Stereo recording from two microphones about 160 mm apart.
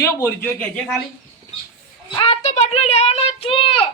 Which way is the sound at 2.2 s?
35° left (ahead or behind).